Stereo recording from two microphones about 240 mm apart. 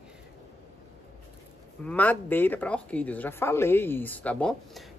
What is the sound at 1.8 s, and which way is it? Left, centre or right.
Speech, centre.